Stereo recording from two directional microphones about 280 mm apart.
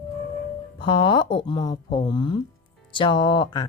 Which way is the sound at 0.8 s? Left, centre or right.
Centre.